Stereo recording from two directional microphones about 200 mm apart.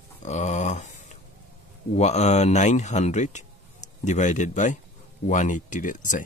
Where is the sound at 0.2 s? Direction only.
35° left (ahead or behind).